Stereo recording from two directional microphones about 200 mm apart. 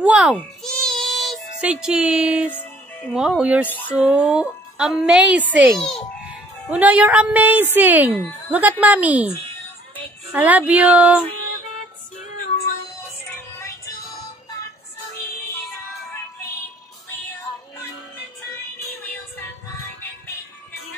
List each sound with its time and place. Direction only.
0.0 s babbling: 5° right (ahead or behind)
0.4 s music: 5° left (ahead or behind)
2.5 s music: 10° left (ahead or behind)
3.2 s speech: 5° right (ahead or behind)
3.6 s speech: 10° left (ahead or behind)
3.9 s a woman's voice: 5° right (ahead or behind)
10.3 s a woman's voice: 10° right (ahead or behind)
13.6 s music: 20° left (ahead or behind)